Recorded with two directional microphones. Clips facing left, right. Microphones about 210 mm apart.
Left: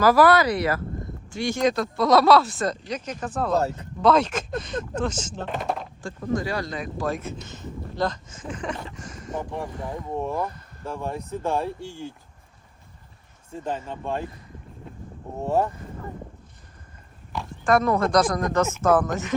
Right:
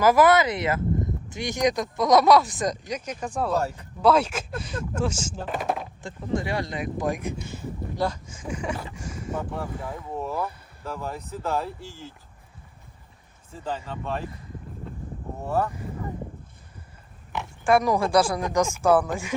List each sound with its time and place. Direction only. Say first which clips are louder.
0.0 s speech: left 1 dB; 20° right (ahead or behind); by 5.9 s 5° right (ahead or behind)
6.0 s speech: left 2 dB; 20° right (ahead or behind); by 10.6 s 5° right (ahead or behind)
10.9 s speech: left 4 dB; 25° left (ahead or behind)
13.7 s speech: left 1 dB; 15° left (ahead or behind)
15.4 s speech: left 3 dB; 25° left (ahead or behind)
17.6 s speech: even; 10° right (ahead or behind)